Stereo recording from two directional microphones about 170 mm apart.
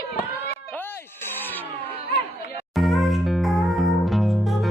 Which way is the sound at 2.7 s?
Centre (ahead or behind).